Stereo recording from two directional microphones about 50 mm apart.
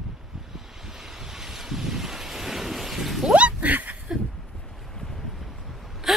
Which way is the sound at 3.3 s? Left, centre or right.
Right.